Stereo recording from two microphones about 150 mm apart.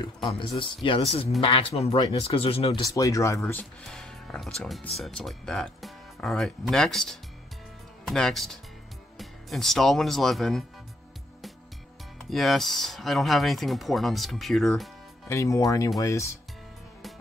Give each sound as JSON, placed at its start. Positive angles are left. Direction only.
{"t": 0.0, "sound": "speech", "side_deg": 35}
{"t": 2.8, "sound": "speech", "side_deg": 25}
{"t": 3.8, "sound": "speech", "side_deg": 5}
{"t": 12.3, "sound": "speech", "side_deg": 0}
{"t": 15.2, "sound": "speech", "side_deg": 20}